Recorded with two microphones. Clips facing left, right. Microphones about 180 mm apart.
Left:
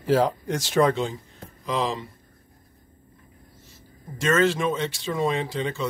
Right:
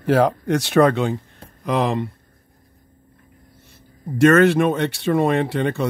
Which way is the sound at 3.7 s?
60° right (ahead or behind).